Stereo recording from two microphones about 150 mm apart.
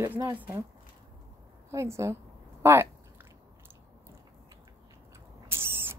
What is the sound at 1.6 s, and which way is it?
A woman's voice, 20° right (ahead or behind).